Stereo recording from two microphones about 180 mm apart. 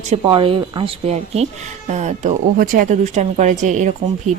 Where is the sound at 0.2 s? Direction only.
30° right (ahead or behind).